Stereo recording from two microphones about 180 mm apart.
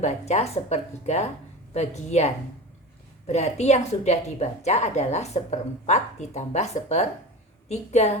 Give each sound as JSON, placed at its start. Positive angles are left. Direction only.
{"t": 0.0, "sound": "a woman's voice", "side_deg": 40}